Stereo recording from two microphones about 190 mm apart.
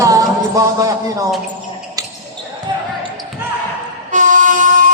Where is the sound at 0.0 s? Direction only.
15° right (ahead or behind).